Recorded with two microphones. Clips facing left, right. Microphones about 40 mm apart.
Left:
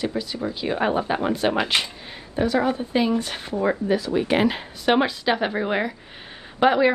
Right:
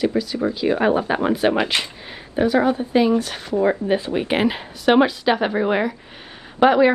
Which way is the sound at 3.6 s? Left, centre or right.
Right.